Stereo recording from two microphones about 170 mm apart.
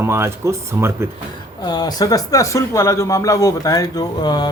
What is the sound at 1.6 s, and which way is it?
Speech, 25° left (ahead or behind).